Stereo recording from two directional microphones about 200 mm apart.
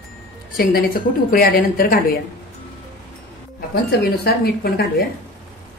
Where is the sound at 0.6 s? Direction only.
45° left (ahead or behind).